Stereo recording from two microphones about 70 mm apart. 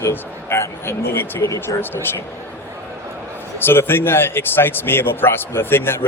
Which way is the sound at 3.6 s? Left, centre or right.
Left.